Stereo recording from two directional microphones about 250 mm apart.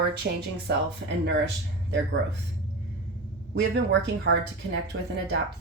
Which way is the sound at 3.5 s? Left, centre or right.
Right.